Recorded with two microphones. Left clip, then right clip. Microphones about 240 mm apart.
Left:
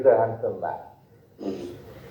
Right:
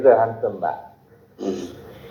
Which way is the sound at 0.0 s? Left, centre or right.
Right.